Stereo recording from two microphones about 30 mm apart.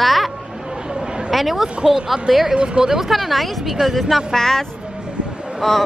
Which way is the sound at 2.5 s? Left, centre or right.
Right.